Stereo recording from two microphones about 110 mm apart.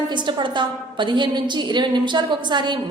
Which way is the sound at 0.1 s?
45° right (ahead or behind).